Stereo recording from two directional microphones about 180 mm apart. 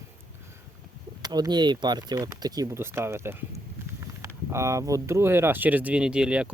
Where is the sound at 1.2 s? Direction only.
20° right (ahead or behind).